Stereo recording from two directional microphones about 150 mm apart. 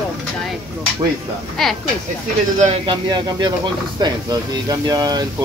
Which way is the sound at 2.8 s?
30° right (ahead or behind).